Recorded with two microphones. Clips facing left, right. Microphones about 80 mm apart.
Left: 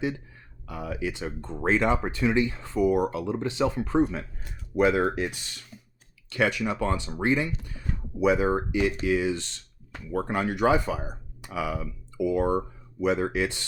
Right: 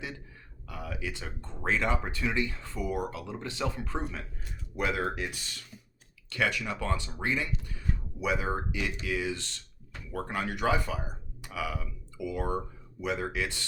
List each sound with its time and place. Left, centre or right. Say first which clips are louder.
0.7 s speech: left 6 dB; left
6.3 s speech: left 5 dB; left